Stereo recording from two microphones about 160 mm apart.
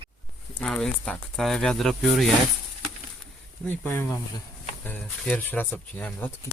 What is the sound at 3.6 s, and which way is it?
Speech, 15° left (ahead or behind).